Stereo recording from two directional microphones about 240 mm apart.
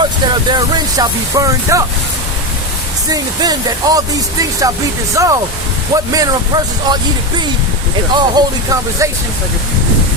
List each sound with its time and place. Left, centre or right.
0.5 s speech: centre
3.1 s speech: centre